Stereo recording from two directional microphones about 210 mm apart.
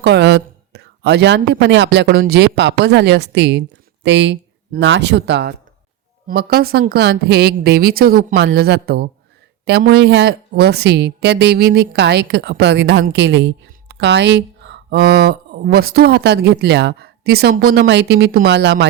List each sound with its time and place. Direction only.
0.0 s a woman's voice: 55° right (ahead or behind)